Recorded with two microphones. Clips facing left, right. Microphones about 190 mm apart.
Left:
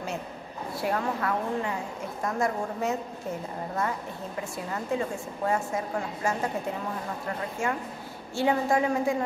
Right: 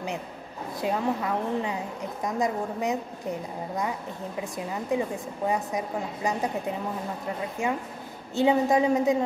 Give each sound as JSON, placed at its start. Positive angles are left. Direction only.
{"t": 0.7, "sound": "speech", "side_deg": -20}
{"t": 7.6, "sound": "speech", "side_deg": -20}